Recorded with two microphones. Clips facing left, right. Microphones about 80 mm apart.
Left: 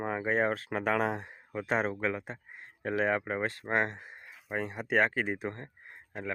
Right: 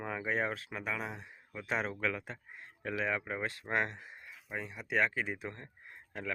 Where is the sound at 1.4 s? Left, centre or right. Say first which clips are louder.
Left 5 dB; left.